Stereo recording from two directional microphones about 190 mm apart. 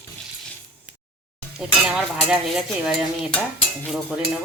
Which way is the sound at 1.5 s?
5° right (ahead or behind).